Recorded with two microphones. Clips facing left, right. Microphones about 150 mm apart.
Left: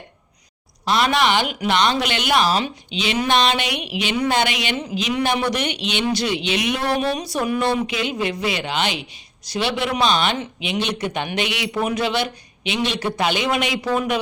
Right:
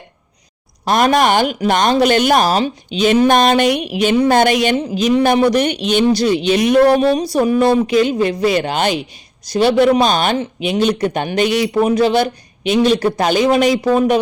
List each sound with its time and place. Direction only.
0.9 s speech: 45° right (ahead or behind)